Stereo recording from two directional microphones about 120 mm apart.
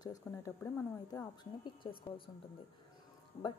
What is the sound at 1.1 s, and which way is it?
A woman's voice, 30° left (ahead or behind).